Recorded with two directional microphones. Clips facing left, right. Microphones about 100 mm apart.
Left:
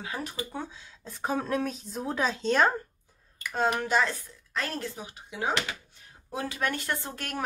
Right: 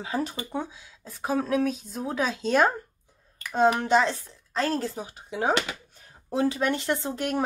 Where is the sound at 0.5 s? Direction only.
15° right (ahead or behind).